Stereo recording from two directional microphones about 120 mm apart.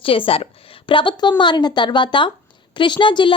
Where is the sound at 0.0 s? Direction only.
50° left (ahead or behind).